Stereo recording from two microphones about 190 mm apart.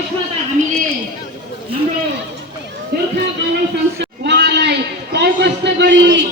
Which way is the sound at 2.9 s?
60° right (ahead or behind).